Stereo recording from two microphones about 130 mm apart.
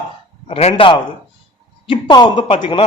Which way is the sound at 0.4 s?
45° left (ahead or behind).